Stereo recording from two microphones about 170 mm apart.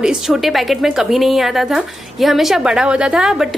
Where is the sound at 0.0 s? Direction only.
5° right (ahead or behind).